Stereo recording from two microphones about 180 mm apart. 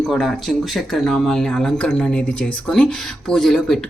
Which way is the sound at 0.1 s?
Centre (ahead or behind).